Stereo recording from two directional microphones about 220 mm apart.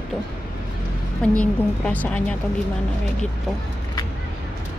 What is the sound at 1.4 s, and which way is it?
Speech, 5° left (ahead or behind).